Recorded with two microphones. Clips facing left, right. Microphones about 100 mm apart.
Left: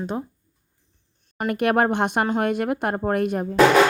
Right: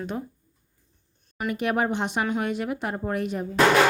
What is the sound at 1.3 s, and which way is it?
Speech, 60° left (ahead or behind).